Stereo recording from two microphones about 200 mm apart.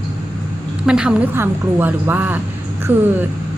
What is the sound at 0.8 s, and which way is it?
A woman's voice, 5° right (ahead or behind).